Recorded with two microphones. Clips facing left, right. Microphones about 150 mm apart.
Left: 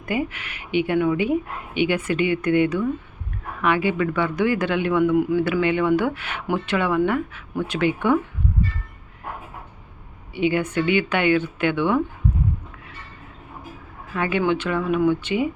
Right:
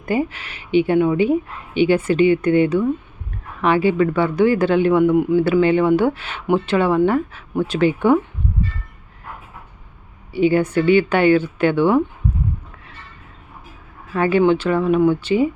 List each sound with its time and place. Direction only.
0.0 s speech: 30° right (ahead or behind)
10.3 s speech: 35° right (ahead or behind)
14.1 s speech: 35° right (ahead or behind)